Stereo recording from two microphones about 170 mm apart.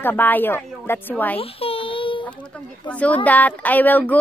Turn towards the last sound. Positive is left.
turn(degrees=10)  # may be behind; listen again after turning